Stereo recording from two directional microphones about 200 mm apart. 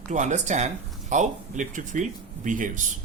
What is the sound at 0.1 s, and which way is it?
Speech, 35° right (ahead or behind).